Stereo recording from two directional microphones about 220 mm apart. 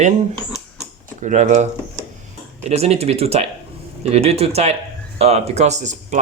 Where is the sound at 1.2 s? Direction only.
35° right (ahead or behind).